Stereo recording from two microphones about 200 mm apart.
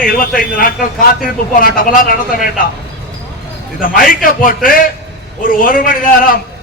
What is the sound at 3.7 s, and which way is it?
A man's voice, 45° left (ahead or behind).